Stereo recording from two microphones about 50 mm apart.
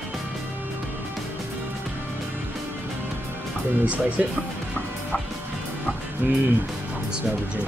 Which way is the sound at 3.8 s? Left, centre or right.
Right.